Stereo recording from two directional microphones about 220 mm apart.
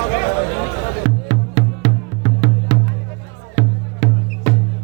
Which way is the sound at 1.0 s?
30° right (ahead or behind).